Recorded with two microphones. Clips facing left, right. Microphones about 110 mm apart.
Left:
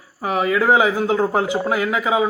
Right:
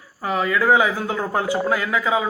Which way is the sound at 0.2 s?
20° left (ahead or behind).